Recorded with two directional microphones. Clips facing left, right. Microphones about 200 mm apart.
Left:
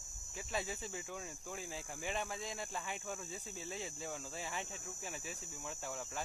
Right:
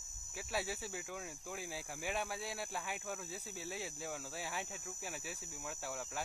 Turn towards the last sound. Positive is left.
turn(degrees=-5)  # may be behind; listen again after turning